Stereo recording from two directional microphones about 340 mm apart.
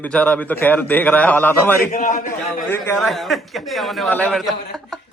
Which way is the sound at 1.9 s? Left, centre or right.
Left.